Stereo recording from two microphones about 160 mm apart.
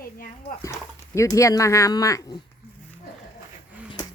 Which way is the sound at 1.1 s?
20° left (ahead or behind).